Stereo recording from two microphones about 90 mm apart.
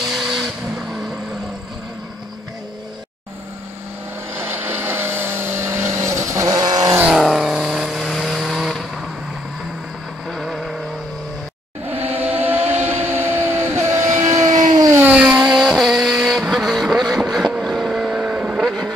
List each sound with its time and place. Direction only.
0.1 s vehicle: centre (ahead or behind)
4.4 s vehicle: 25° right (ahead or behind); by 7.0 s 45° right (ahead or behind)
7.1 s vehicle: centre (ahead or behind)
10.2 s vehicle: centre (ahead or behind)
11.9 s vehicle: 20° right (ahead or behind); by 14.9 s 45° right (ahead or behind)
14.9 s vehicle: 25° right (ahead or behind)
15.4 s vehicle: 5° right (ahead or behind)
18.6 s vehicle: centre (ahead or behind)